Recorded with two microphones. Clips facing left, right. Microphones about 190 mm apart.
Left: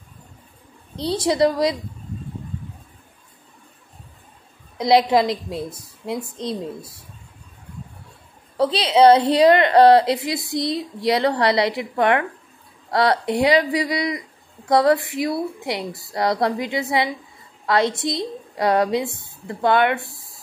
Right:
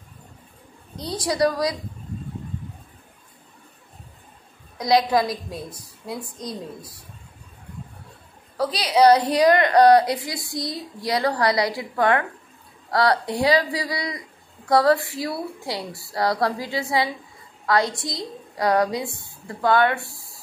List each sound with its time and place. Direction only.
0.9 s a woman's voice: 25° left (ahead or behind)
4.7 s a woman's voice: 25° left (ahead or behind)
8.5 s a woman's voice: 25° left (ahead or behind)